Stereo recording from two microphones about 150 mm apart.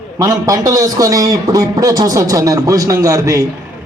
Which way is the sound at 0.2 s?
20° right (ahead or behind).